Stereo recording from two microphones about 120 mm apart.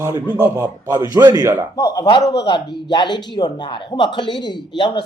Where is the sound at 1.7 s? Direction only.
30° left (ahead or behind).